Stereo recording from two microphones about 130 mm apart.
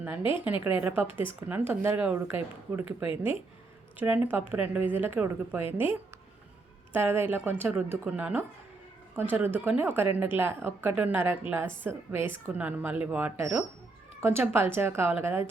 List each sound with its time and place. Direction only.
0.2 s a woman's voice: 40° left (ahead or behind)
0.4 s speech: 15° right (ahead or behind)
6.9 s speech: 15° right (ahead or behind)